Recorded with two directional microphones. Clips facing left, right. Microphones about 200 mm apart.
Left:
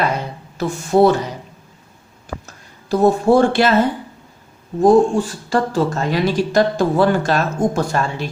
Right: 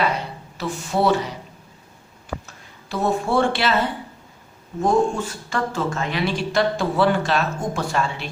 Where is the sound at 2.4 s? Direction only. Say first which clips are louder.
Left 13 dB; 40° left (ahead or behind).